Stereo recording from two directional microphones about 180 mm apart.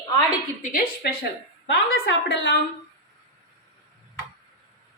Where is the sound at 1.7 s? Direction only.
80° left.